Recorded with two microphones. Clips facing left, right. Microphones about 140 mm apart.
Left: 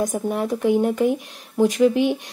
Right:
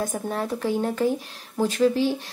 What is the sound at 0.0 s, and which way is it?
Speech, 15° left (ahead or behind).